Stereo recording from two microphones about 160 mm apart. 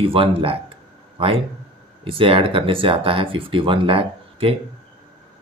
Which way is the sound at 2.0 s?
35° right (ahead or behind).